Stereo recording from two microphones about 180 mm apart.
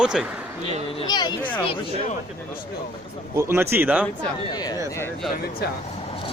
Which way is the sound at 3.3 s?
15° right (ahead or behind).